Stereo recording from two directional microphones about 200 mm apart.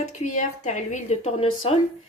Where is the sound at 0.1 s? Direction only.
35° left (ahead or behind).